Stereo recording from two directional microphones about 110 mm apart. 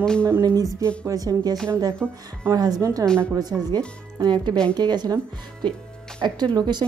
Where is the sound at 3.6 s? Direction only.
40° right (ahead or behind).